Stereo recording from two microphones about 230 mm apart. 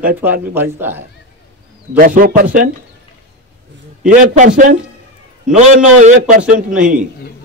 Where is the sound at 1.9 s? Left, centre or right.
Right.